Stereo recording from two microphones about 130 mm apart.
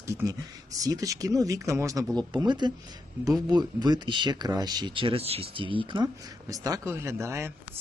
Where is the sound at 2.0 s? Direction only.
10° left (ahead or behind).